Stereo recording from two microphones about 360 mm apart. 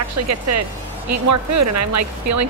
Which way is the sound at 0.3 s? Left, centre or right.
Right.